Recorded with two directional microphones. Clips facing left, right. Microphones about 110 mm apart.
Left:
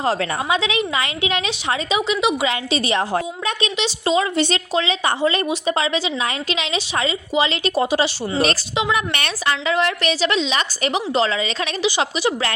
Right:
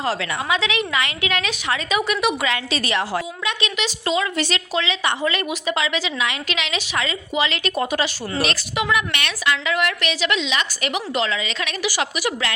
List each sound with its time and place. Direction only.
0.0 s a woman's voice: 35° left (ahead or behind)